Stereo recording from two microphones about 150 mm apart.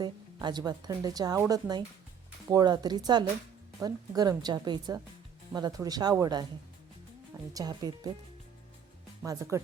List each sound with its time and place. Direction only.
0.0 s speech: 30° right (ahead or behind)
7.5 s speech: 25° right (ahead or behind)
9.2 s speech: 20° right (ahead or behind)